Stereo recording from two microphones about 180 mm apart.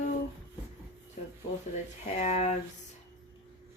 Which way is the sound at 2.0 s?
40° left (ahead or behind).